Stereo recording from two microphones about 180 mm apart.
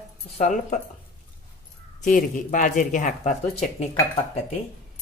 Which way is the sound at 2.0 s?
45° left (ahead or behind).